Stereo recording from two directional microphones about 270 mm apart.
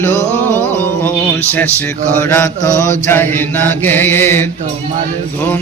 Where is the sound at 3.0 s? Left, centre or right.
Centre.